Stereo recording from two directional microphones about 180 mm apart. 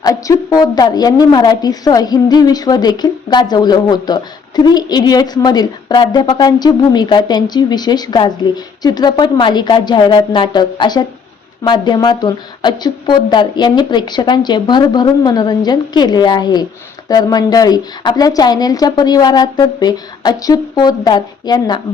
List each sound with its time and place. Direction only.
0.0 s a woman's voice: 20° left (ahead or behind)